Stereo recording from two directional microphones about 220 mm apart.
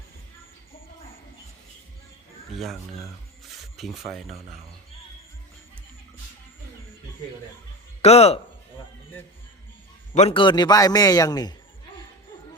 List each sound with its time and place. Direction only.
3.4 s rub: centre (ahead or behind)
4.3 s speech: 30° right (ahead or behind)
8.0 s speech: 30° left (ahead or behind)
10.2 s a man's voice: 25° left (ahead or behind)